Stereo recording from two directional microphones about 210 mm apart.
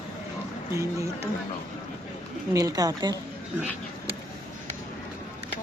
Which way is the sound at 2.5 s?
15° right (ahead or behind).